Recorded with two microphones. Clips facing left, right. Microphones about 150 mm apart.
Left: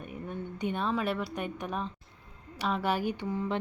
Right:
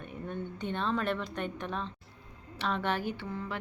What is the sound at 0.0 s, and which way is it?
A woman's voice, 10° left (ahead or behind).